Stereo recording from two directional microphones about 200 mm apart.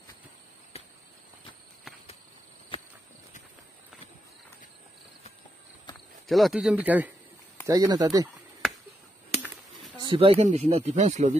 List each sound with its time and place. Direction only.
0.7 s a sound: 30° left (ahead or behind)
6.2 s speech: centre (ahead or behind); by 8.3 s 20° right (ahead or behind)
9.9 s speech: 25° right (ahead or behind)